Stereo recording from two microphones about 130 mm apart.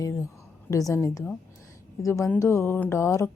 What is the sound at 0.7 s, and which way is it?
Speech, 25° left (ahead or behind).